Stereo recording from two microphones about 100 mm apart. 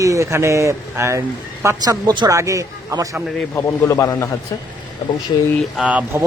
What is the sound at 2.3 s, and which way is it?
Speech, 30° right (ahead or behind).